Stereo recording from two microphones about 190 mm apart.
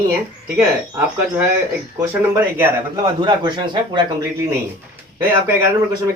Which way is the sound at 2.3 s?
15° right (ahead or behind).